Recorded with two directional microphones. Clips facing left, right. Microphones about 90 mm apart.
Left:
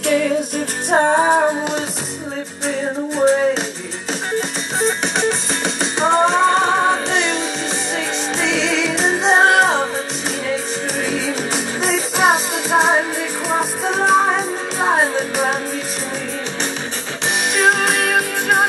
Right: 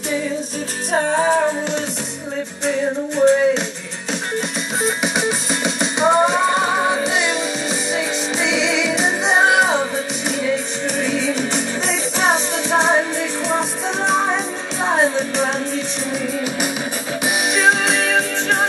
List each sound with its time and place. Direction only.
0.0 s music: 70° left (ahead or behind)
0.8 s music: 40° left (ahead or behind)
1.2 s music: 30° left (ahead or behind)
3.2 s music: centre (ahead or behind)
17.6 s music: centre (ahead or behind)